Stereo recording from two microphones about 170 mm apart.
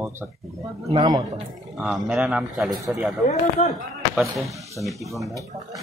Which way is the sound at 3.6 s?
40° left (ahead or behind).